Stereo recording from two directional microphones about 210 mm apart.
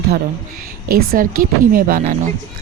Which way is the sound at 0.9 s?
40° right (ahead or behind).